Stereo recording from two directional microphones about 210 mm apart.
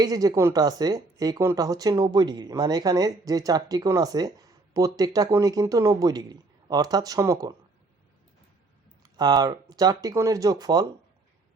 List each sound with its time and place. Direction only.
0.0 s speech: 20° right (ahead or behind)
9.0 s speech: 20° right (ahead or behind)